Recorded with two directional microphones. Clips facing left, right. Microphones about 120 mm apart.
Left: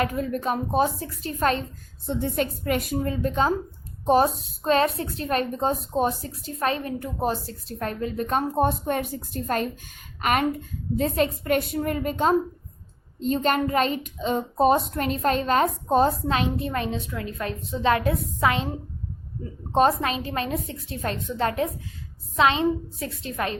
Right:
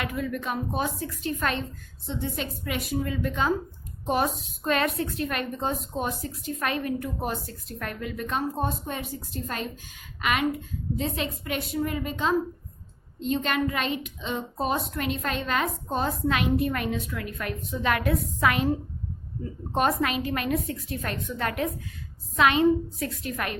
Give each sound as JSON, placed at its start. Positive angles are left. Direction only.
{"t": 0.0, "sound": "a woman's voice", "side_deg": 40}
{"t": 2.0, "sound": "a woman's voice", "side_deg": 50}
{"t": 19.7, "sound": "a woman's voice", "side_deg": 30}